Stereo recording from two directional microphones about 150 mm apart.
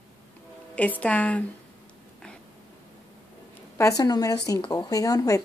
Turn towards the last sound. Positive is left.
turn(degrees=25)  # may be behind; listen again after turning